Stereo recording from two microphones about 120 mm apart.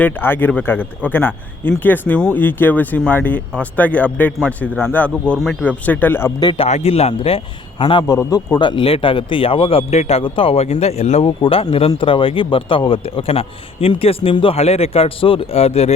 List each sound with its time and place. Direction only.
0.0 s speech: 15° left (ahead or behind)
6.4 s speech: 40° left (ahead or behind)
6.7 s speech: 65° left (ahead or behind)
11.3 s speech: 50° left (ahead or behind)